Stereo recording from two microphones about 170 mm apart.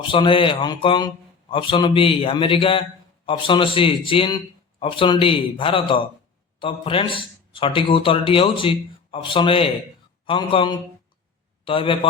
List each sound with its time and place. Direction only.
0.1 s a man's voice: 30° left (ahead or behind)